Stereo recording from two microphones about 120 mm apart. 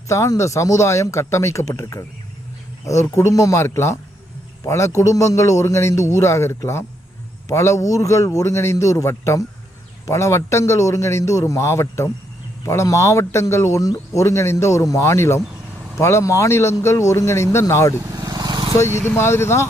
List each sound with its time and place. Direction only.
0.1 s speech: 25° left (ahead or behind)
18.1 s vehicle: 35° right (ahead or behind)
18.8 s speech: 20° left (ahead or behind)